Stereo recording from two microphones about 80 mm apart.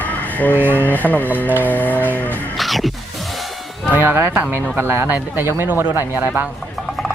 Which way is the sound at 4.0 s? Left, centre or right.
Right.